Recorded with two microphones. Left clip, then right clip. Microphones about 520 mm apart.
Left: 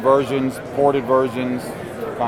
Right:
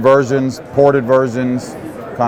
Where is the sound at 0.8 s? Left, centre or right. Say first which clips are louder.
Right 4 dB; right.